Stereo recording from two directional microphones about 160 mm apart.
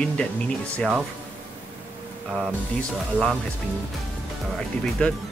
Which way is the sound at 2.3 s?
5° right (ahead or behind).